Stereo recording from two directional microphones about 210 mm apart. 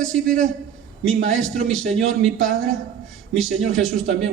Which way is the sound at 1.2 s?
70° right (ahead or behind).